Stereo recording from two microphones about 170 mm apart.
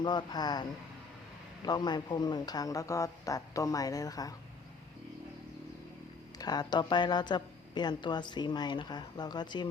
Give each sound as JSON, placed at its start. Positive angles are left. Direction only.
{"t": 0.0, "sound": "a woman's voice", "side_deg": 25}
{"t": 6.4, "sound": "a woman's voice", "side_deg": 25}